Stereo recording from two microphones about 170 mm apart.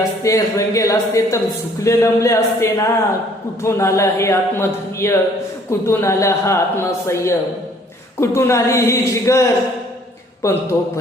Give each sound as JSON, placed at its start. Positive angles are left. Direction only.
{"t": 0.2, "sound": "a man's voice", "side_deg": 20}